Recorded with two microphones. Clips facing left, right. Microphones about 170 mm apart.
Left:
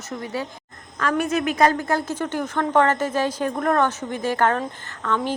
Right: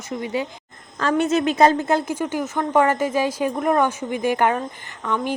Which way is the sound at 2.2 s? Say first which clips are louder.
Right 1 dB; 10° right (ahead or behind).